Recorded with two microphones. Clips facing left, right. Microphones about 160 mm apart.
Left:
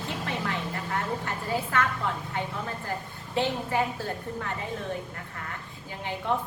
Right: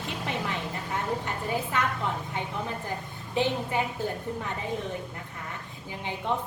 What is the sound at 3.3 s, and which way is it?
Speech, 20° right (ahead or behind).